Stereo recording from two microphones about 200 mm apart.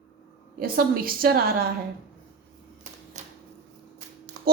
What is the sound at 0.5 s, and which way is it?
A woman's voice, 50° right (ahead or behind).